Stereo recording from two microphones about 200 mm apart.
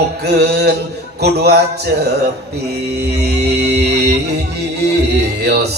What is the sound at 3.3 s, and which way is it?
Music, 55° right (ahead or behind).